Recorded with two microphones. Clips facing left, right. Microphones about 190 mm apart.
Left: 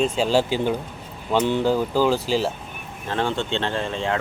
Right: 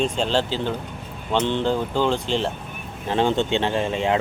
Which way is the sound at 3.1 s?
20° right (ahead or behind).